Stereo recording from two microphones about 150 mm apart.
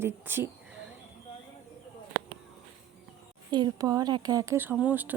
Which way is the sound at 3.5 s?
30° right (ahead or behind).